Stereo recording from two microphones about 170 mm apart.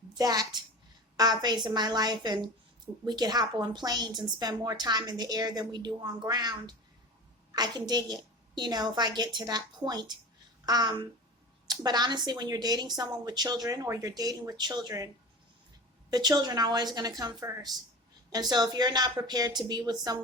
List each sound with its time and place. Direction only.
0.1 s a woman's voice: 20° right (ahead or behind)